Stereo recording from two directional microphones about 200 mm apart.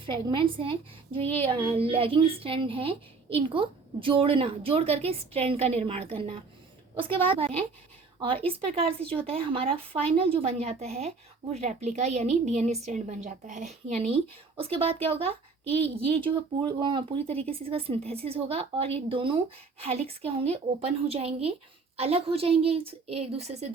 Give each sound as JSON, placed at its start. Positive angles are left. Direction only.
{"t": 0.0, "sound": "a woman's voice", "side_deg": -25}